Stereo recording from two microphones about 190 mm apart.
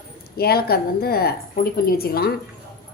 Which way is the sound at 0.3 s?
55° left (ahead or behind).